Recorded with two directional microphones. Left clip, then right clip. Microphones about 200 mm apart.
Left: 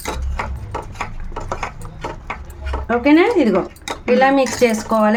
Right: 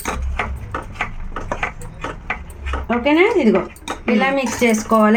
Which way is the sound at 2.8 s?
15° left (ahead or behind).